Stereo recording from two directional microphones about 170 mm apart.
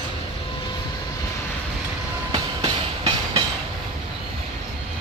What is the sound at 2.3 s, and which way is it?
Train, 30° right (ahead or behind).